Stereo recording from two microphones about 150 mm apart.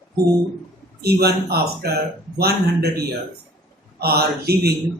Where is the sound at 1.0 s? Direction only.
90° right.